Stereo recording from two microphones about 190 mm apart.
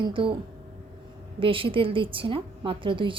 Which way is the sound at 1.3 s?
30° right (ahead or behind).